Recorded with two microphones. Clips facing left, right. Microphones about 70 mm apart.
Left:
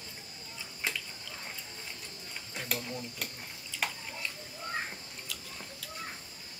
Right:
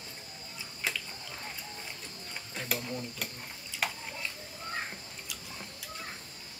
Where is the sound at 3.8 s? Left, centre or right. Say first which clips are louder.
Right 1 dB; centre.